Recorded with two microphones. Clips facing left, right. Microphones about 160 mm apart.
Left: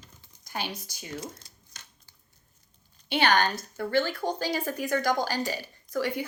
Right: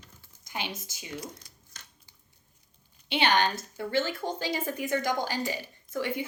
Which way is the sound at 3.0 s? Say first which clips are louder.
Left 1 dB; 20° right (ahead or behind).